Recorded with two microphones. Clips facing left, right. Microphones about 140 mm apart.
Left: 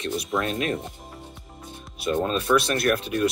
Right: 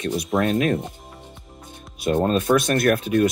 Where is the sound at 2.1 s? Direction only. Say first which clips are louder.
Right 4 dB; 50° right (ahead or behind).